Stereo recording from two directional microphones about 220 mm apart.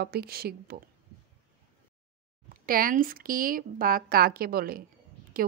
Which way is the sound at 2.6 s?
40° right (ahead or behind).